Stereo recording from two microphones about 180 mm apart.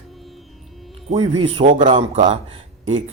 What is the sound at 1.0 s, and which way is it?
Speech, 35° right (ahead or behind).